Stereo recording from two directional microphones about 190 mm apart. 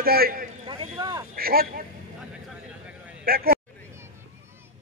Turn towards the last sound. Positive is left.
turn(degrees=-50)  # may be behind; listen again after turning